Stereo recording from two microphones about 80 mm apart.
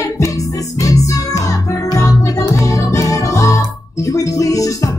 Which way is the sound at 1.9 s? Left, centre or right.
Left.